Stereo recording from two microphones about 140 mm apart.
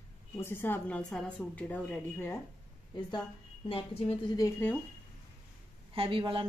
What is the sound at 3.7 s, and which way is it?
Speech, 40° left (ahead or behind).